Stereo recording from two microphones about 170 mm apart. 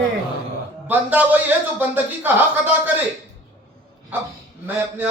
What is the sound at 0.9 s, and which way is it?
A man's voice, 10° right (ahead or behind).